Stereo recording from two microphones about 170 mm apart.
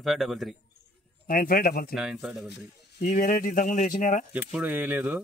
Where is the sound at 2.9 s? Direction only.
55° left (ahead or behind).